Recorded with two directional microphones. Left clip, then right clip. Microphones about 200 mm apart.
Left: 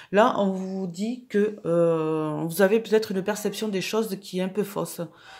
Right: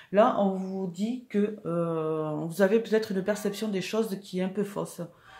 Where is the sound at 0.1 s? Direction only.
45° left (ahead or behind).